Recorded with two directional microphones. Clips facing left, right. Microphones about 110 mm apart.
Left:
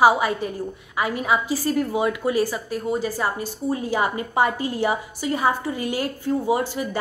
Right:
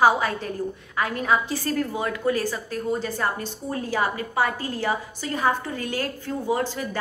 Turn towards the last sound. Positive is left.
turn(degrees=15)  # may be behind; listen again after turning